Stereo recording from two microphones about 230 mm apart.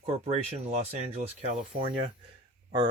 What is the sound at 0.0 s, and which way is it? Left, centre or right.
Speech, right.